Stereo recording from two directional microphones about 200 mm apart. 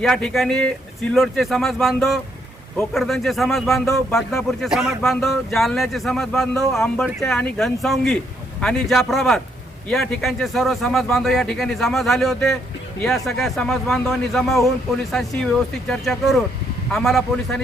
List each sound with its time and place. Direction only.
0.0 s speech: 5° left (ahead or behind)